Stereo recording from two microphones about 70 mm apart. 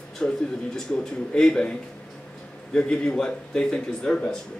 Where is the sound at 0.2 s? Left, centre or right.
Centre.